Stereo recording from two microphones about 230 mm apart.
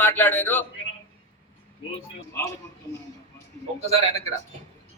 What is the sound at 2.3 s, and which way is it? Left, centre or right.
Speech, centre.